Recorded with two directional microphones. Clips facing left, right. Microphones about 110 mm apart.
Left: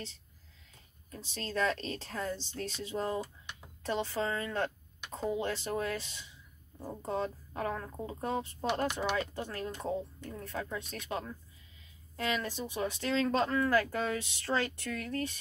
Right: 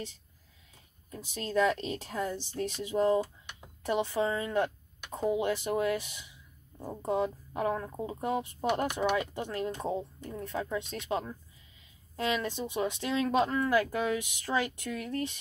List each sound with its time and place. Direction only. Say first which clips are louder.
1.1 s speech: right 6 dB; 15° right (ahead or behind)